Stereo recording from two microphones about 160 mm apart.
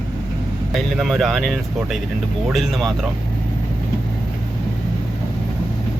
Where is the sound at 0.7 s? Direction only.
Centre (ahead or behind).